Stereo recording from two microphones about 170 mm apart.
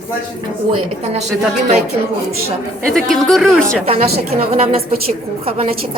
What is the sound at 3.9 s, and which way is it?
A woman's voice, 35° right (ahead or behind).